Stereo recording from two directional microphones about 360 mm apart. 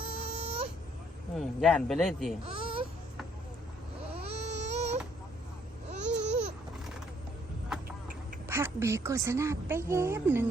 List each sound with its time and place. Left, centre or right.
0.0 s baby cry: centre
1.4 s a man's voice: centre
2.4 s baby cry: centre
4.1 s baby cry: centre
5.9 s babbling: centre
8.4 s a woman's voice: centre